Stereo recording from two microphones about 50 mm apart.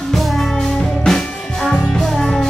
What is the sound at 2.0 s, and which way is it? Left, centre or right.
Music, centre.